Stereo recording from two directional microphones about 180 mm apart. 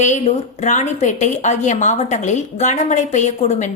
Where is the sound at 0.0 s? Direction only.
40° left (ahead or behind).